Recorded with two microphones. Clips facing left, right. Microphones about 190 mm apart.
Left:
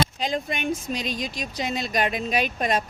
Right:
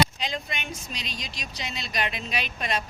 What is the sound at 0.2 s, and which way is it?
Speech, 50° left (ahead or behind).